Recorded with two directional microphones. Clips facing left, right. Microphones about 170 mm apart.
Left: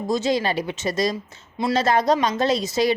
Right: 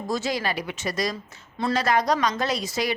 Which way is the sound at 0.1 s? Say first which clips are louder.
Left 5 dB; 20° left (ahead or behind).